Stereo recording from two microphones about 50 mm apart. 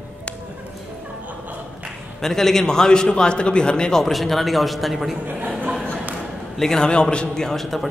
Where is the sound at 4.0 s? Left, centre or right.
Centre.